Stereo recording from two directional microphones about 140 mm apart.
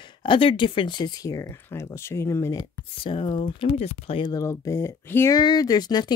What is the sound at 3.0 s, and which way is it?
Speech, 35° left (ahead or behind).